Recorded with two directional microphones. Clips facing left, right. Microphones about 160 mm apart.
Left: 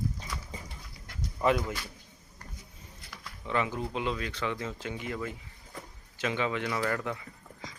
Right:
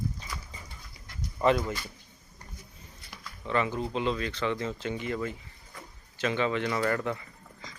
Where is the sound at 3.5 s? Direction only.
10° left (ahead or behind).